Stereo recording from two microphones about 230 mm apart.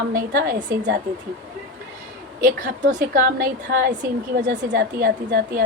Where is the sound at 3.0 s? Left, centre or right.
Right.